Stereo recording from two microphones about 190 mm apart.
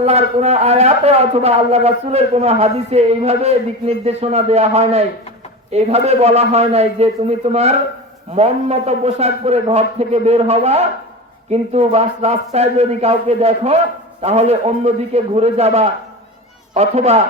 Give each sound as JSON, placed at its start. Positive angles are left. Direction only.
{"t": 0.0, "sound": "a man's voice", "side_deg": -35}